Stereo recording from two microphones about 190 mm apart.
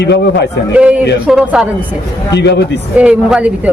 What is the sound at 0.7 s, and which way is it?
Speech, 5° right (ahead or behind).